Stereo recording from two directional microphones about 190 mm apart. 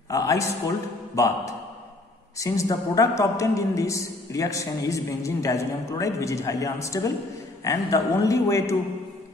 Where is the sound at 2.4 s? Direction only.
15° left (ahead or behind).